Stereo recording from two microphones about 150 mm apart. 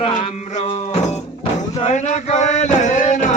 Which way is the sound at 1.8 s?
50° left (ahead or behind).